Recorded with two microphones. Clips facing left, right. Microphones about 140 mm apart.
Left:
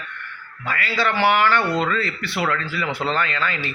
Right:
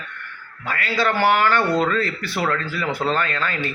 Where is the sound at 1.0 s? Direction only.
45° right (ahead or behind).